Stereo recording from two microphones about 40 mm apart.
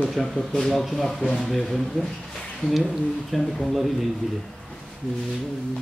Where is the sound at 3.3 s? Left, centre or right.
Centre.